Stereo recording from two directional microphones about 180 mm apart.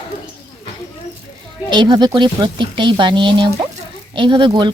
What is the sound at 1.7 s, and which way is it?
Speech, 25° right (ahead or behind).